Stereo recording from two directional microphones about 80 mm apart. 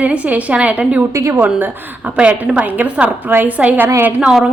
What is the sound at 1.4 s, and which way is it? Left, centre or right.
A woman's voice, centre.